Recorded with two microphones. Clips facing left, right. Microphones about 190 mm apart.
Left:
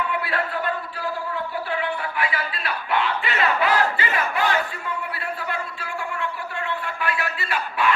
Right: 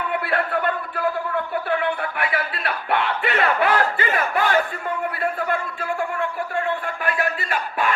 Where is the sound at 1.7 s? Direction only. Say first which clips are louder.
Right 4 dB; 55° right (ahead or behind).